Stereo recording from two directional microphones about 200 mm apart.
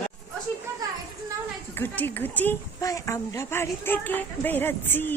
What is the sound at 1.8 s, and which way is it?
Speech, 10° left (ahead or behind).